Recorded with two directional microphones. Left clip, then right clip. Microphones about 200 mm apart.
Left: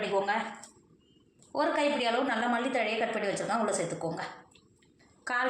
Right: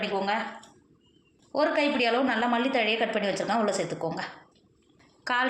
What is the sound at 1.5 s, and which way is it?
A woman's voice, 50° right (ahead or behind).